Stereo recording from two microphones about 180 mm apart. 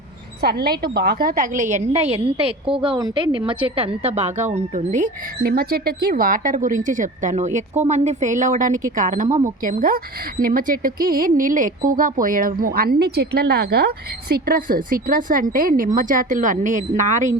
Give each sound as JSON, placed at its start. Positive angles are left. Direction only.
{"t": 0.4, "sound": "a woman's voice", "side_deg": -60}
{"t": 1.2, "sound": "a woman's voice", "side_deg": -50}